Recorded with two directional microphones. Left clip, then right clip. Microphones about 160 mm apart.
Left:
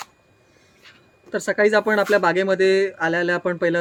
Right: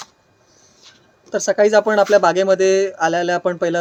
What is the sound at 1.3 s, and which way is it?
Speech, 20° left (ahead or behind).